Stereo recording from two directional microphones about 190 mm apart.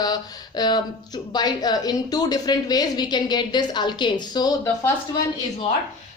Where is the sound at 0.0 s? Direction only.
20° left (ahead or behind).